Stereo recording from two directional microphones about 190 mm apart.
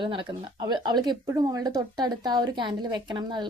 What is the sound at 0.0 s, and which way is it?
Speech, 25° right (ahead or behind).